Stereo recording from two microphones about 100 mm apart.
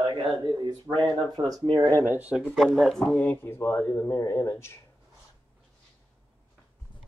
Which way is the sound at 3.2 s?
20° left (ahead or behind).